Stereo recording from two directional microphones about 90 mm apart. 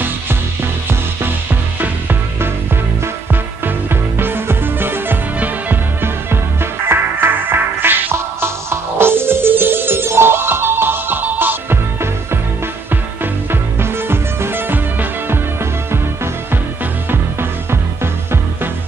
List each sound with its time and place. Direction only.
1.8 s music: 20° right (ahead or behind)
3.6 s music: 25° right (ahead or behind)
17.1 s music: 25° right (ahead or behind)